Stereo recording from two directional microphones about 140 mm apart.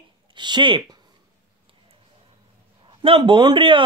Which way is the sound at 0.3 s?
35° right (ahead or behind).